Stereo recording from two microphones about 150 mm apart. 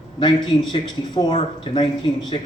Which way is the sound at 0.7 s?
30° left (ahead or behind).